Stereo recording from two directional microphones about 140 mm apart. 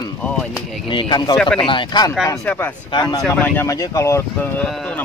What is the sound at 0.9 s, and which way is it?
Speech, 35° left (ahead or behind).